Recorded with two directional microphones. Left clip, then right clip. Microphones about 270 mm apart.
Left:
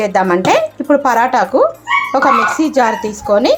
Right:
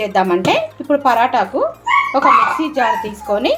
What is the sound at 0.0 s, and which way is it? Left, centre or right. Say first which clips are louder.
Speech: left 2 dB; centre.